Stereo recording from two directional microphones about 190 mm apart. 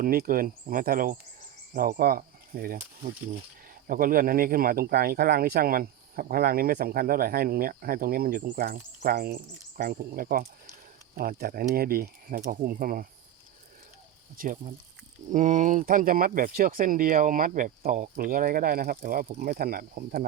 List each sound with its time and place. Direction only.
0.0 s speech: 50° right (ahead or behind)
14.3 s speech: 45° right (ahead or behind)